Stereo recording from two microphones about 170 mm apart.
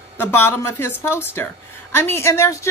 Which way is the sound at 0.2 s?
15° left (ahead or behind).